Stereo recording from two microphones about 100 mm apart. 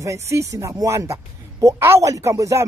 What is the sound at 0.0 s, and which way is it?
Speech, 30° right (ahead or behind).